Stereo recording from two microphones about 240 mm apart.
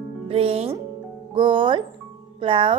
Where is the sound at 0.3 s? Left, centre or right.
Right.